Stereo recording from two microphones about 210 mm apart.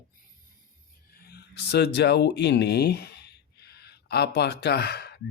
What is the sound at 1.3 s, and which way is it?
Speech, 50° left (ahead or behind).